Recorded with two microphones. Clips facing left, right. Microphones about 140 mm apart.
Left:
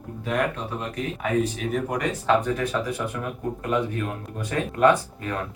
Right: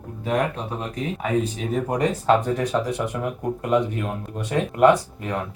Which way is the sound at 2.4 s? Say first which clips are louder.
Right 3 dB; 20° right (ahead or behind).